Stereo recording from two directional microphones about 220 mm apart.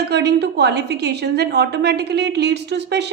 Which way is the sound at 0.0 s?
50° right (ahead or behind).